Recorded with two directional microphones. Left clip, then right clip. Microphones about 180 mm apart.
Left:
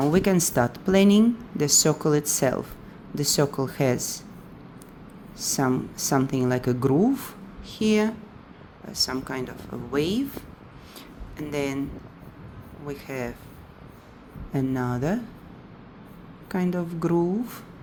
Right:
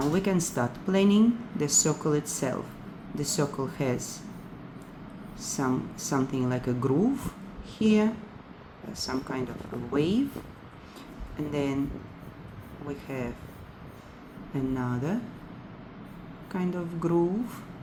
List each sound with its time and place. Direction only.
0.1 s speech: 50° left (ahead or behind)
5.4 s speech: 50° left (ahead or behind)
11.3 s speech: 50° left (ahead or behind)
12.9 s speech: 50° left (ahead or behind)
14.5 s speech: 50° left (ahead or behind)
16.5 s speech: 50° left (ahead or behind)